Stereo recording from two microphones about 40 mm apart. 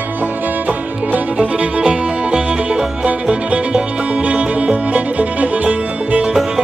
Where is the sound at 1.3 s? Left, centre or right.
Right.